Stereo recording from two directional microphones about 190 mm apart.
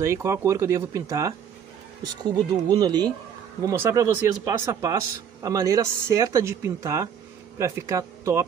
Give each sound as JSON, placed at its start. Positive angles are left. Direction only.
{"t": 0.0, "sound": "speech", "side_deg": -15}
{"t": 2.5, "sound": "speech", "side_deg": -20}